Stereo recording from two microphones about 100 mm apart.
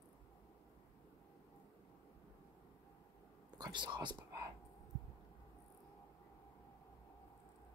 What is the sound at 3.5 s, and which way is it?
Speech, 45° right (ahead or behind).